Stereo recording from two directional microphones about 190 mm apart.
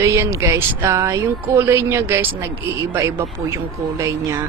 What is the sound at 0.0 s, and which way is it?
Speech, 15° right (ahead or behind).